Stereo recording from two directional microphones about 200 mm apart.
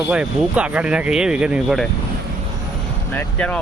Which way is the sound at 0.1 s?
5° right (ahead or behind).